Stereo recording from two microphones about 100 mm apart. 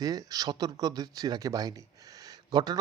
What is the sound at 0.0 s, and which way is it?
A man's voice, 40° right (ahead or behind).